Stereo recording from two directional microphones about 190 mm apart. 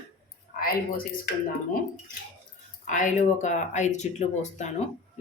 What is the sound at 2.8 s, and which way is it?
Speech, 40° left (ahead or behind).